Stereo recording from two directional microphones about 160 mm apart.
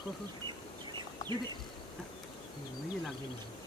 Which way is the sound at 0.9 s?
30° right (ahead or behind).